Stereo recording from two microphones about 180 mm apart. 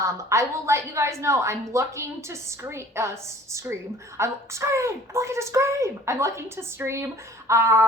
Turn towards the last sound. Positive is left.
turn(degrees=-15)  # may be behind; listen again after turning